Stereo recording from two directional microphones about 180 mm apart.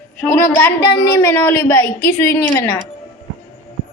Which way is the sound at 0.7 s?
65° left (ahead or behind).